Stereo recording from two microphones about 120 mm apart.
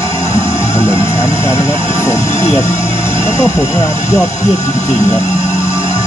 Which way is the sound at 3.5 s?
25° left (ahead or behind).